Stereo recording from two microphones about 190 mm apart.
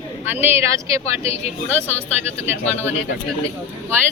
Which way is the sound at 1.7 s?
5° left (ahead or behind).